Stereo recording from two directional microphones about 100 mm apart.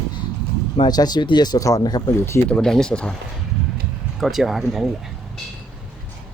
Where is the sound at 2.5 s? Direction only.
5° left (ahead or behind).